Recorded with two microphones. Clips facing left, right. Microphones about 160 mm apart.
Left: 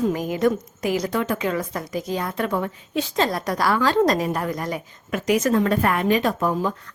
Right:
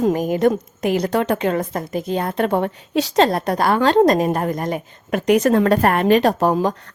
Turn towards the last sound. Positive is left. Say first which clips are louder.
# right 5 dB
turn(degrees=-75)  # may be behind; listen again after turning